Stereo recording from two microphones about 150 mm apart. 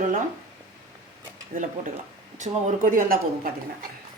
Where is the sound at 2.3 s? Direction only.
55° right (ahead or behind).